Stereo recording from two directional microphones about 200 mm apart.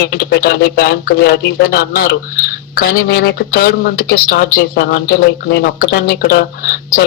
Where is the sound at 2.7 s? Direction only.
50° left (ahead or behind).